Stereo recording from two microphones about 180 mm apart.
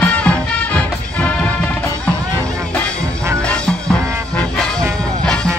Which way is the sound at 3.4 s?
5° left (ahead or behind).